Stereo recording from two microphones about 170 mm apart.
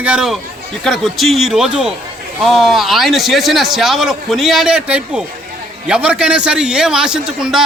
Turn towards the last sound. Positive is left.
turn(degrees=-5)  # may be behind; listen again after turning